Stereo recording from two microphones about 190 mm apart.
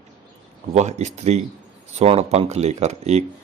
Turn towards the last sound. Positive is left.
turn(degrees=-35)  # may be behind; listen again after turning